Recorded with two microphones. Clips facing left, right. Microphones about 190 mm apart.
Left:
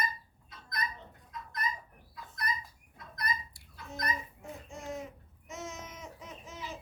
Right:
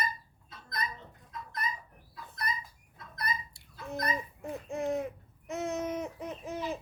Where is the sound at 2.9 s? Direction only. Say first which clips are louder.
Right 1 dB; 25° right (ahead or behind).